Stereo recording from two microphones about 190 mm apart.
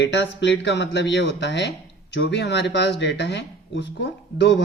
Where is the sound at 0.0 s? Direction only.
70° left (ahead or behind).